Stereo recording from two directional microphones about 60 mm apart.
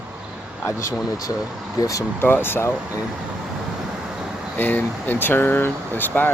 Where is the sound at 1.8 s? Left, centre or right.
Left.